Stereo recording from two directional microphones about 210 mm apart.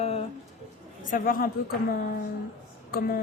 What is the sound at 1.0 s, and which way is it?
Speech, 40° left (ahead or behind).